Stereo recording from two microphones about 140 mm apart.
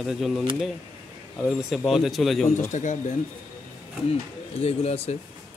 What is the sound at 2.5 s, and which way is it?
Speech, 60° left (ahead or behind).